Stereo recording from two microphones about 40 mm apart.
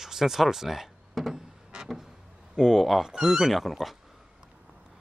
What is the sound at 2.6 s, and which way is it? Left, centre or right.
Speech, centre.